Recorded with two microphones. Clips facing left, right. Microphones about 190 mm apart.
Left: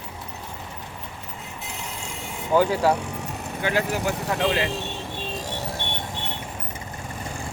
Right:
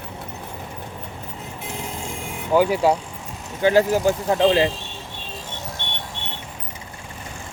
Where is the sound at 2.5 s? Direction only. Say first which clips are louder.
Right 2 dB; 15° right (ahead or behind).